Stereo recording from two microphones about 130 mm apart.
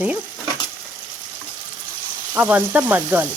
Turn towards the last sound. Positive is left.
turn(degrees=-15)  # may be behind; listen again after turning